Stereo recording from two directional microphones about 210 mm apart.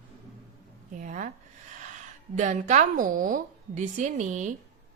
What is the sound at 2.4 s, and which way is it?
A woman's voice, 35° right (ahead or behind).